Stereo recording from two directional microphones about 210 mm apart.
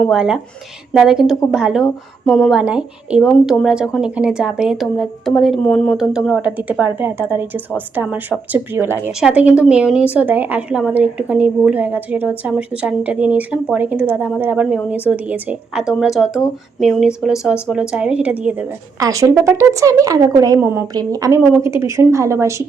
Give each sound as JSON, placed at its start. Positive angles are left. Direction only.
{"t": 0.1, "sound": "a woman's voice", "side_deg": -5}
{"t": 18.9, "sound": "a woman's voice", "side_deg": -15}